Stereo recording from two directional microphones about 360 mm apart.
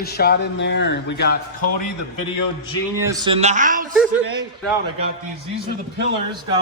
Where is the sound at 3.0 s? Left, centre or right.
Centre.